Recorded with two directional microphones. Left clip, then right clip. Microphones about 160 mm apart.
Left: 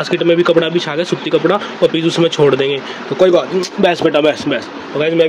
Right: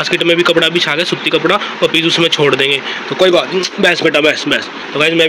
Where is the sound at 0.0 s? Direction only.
25° left (ahead or behind).